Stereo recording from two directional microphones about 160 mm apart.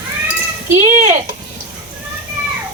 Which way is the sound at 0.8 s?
50° right (ahead or behind).